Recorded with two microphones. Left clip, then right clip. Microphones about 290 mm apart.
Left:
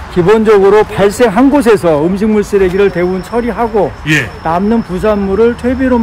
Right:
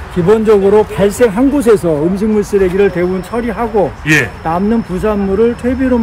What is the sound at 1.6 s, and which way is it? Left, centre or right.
Speech, centre.